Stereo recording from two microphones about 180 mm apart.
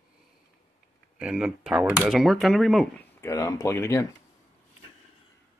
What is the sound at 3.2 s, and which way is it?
Speech, 15° left (ahead or behind).